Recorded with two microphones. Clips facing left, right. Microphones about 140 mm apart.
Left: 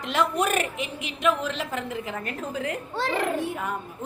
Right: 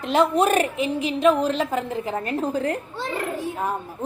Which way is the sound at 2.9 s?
90° left.